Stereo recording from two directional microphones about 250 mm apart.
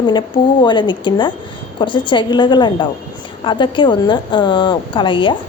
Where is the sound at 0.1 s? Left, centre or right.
Centre.